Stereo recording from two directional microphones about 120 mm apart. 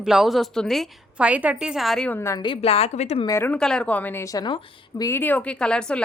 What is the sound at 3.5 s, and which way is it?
Speech, 5° left (ahead or behind).